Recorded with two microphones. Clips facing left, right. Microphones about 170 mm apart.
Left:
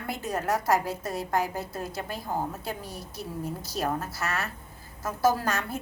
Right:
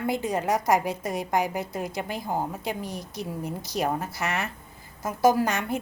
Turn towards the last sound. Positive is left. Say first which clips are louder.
# right 4 dB
turn(degrees=-20)  # may be behind; listen again after turning